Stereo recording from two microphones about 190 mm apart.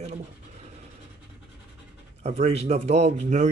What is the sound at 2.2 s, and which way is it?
Speech, 35° right (ahead or behind).